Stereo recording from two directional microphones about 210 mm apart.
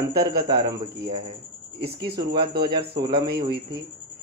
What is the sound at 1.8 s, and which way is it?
A man's voice, 50° right (ahead or behind).